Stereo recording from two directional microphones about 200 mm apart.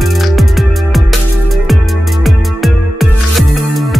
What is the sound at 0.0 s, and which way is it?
Music, centre (ahead or behind).